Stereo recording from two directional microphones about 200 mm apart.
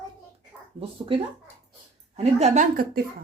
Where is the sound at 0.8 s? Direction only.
25° right (ahead or behind).